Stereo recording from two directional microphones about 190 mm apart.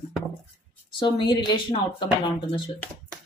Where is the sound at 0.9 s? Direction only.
25° left (ahead or behind).